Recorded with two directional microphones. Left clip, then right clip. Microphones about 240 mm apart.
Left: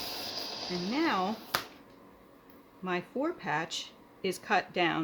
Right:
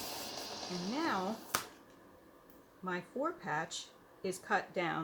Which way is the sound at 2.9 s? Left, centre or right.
Left.